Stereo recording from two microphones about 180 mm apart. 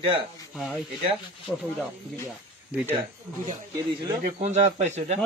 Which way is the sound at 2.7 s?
10° right (ahead or behind).